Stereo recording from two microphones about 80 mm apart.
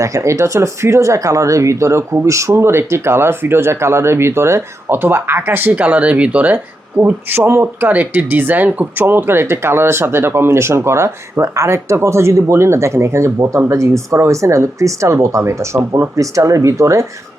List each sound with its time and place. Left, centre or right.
0.0 s speech: right